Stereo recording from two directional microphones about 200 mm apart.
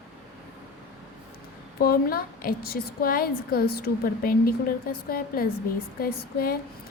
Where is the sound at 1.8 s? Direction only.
50° left (ahead or behind).